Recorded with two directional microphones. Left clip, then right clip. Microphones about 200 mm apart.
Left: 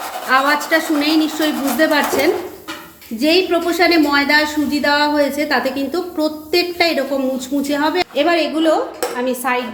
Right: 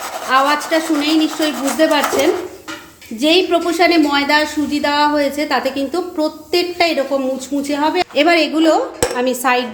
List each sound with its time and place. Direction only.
0.3 s a woman's voice: 5° right (ahead or behind)
8.1 s dishes: 25° right (ahead or behind)